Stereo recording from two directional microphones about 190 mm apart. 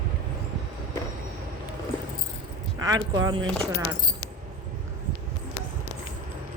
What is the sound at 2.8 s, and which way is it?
Speech, 20° right (ahead or behind).